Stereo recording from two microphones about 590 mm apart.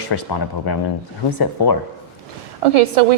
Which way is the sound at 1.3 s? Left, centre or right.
Left.